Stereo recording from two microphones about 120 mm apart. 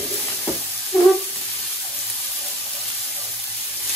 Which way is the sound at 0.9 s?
15° left (ahead or behind).